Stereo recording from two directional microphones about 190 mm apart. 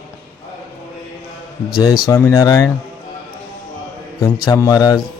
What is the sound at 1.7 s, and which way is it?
A man's voice, 20° left (ahead or behind).